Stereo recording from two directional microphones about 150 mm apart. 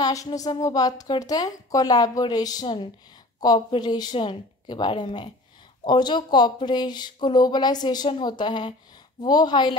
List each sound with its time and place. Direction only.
0.0 s a woman's voice: 20° left (ahead or behind)